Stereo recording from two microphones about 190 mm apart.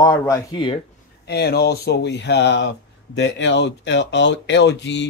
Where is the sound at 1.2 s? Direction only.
60° left (ahead or behind).